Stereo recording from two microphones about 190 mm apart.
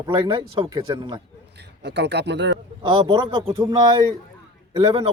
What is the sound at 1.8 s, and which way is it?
Speech, 60° right (ahead or behind).